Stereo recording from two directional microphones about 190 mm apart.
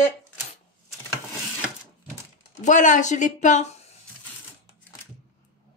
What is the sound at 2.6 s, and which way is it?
A woman's voice, 40° left (ahead or behind).